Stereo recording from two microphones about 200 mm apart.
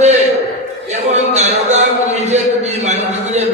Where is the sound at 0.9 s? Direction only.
35° right (ahead or behind).